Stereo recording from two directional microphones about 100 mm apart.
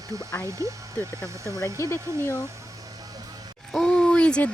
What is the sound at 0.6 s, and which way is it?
Speech, 30° right (ahead or behind).